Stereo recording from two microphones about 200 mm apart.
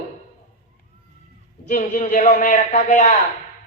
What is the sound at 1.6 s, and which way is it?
A man's voice, 40° left (ahead or behind).